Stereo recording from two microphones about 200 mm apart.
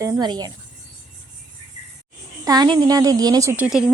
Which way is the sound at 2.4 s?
20° right (ahead or behind).